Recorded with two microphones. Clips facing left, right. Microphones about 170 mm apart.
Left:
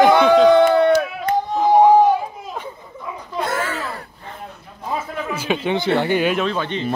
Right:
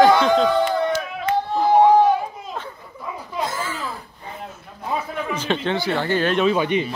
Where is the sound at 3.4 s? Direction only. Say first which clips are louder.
Left 4 dB; 65° left (ahead or behind).